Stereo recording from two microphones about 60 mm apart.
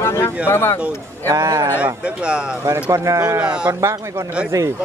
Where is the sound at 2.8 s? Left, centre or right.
Right.